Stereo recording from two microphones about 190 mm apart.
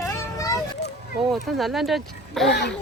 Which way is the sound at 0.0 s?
15° left (ahead or behind).